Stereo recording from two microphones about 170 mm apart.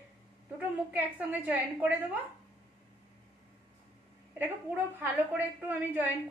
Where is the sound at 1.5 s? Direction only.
10° right (ahead or behind).